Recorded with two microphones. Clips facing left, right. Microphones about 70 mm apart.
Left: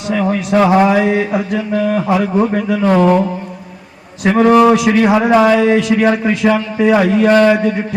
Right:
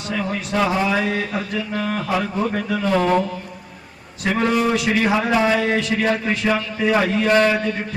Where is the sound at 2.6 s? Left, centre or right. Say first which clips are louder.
Left 6 dB; left.